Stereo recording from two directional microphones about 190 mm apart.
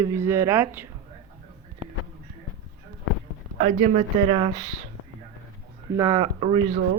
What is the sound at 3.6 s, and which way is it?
Speech, 40° right (ahead or behind).